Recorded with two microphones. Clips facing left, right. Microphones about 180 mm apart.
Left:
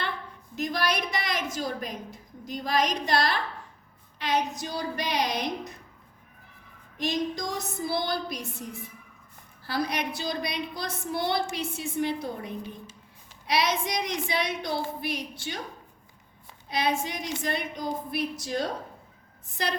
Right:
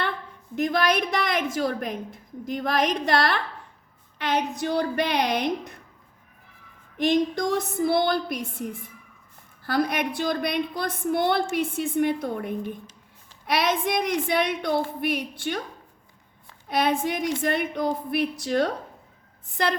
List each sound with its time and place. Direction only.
0.5 s a woman's voice: 55° right (ahead or behind)
7.0 s a woman's voice: 60° right (ahead or behind)
16.6 s a woman's voice: 55° right (ahead or behind)